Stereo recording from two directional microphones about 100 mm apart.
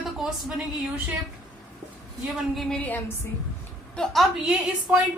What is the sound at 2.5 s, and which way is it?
Speech, centre (ahead or behind).